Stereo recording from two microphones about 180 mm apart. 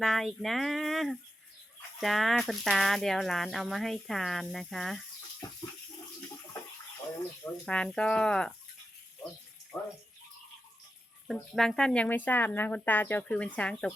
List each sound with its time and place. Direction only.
0.0 s speech: centre (ahead or behind)
5.4 s water: 20° left (ahead or behind)
7.4 s speech: 5° left (ahead or behind)
9.7 s speech: centre (ahead or behind)
11.3 s speech: centre (ahead or behind)